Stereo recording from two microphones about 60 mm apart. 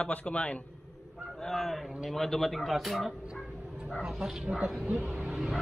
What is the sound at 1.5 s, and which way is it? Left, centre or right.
A man's voice, centre.